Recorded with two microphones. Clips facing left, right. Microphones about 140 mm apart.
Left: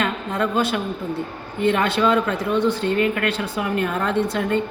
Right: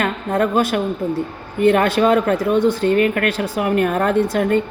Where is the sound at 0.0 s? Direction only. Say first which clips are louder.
Right 4 dB; 50° right (ahead or behind).